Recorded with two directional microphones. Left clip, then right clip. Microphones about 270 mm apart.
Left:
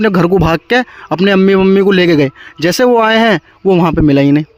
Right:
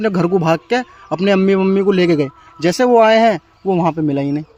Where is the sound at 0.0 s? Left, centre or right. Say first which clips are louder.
Left 5 dB; left.